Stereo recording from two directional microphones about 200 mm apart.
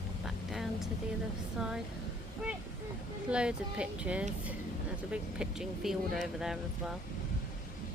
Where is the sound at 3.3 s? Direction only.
5° right (ahead or behind).